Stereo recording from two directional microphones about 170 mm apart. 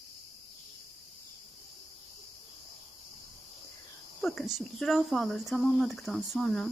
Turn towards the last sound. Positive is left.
turn(degrees=0)  # may be behind; listen again after turning